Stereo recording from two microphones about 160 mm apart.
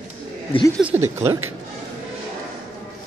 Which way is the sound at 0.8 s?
15° right (ahead or behind).